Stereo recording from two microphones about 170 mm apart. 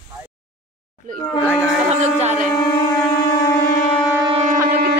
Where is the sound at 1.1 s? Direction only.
50° right (ahead or behind).